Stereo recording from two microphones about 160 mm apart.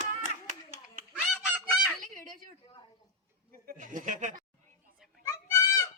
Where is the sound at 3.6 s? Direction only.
60° right (ahead or behind).